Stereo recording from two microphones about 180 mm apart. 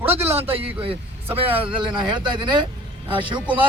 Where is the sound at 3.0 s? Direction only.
25° right (ahead or behind).